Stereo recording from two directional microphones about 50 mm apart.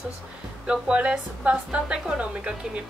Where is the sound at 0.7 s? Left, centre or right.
Centre.